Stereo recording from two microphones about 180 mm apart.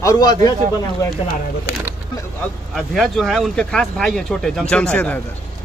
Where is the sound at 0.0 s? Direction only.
20° left (ahead or behind).